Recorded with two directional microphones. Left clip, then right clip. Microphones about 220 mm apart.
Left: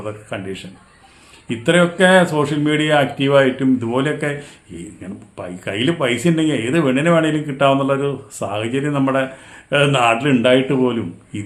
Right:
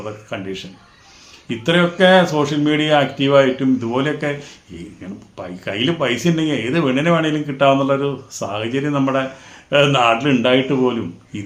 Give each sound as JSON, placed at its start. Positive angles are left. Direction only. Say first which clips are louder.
{"t": 0.0, "sound": "speech", "louder": "even", "side_deg": 10}